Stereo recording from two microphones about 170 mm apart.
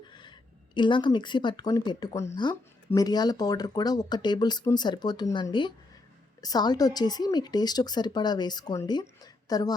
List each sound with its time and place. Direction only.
0.1 s a woman's voice: 25° left (ahead or behind)